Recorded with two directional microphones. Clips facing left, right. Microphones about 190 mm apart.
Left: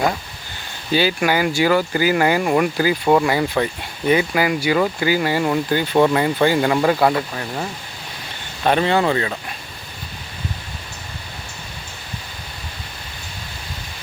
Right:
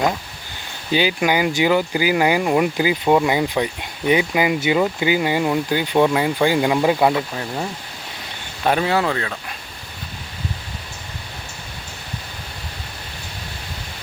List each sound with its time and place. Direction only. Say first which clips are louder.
0.9 s speech: even; 15° right (ahead or behind)
8.6 s speech: left 2 dB; 5° right (ahead or behind)